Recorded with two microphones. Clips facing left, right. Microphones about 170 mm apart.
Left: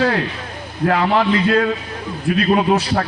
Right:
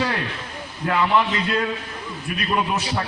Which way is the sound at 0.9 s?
55° left (ahead or behind).